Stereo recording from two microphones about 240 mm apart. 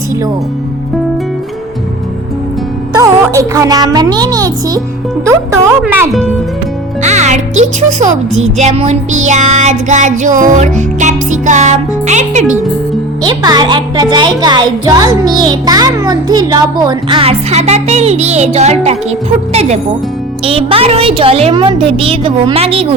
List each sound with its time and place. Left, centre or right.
3.0 s a child's voice: centre
7.0 s music: right
7.6 s a child's voice: right
13.2 s a child's voice: centre